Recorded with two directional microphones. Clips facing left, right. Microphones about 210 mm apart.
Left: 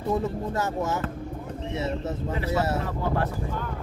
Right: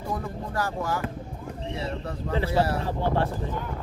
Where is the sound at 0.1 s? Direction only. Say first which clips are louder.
Left 6 dB; 25° left (ahead or behind).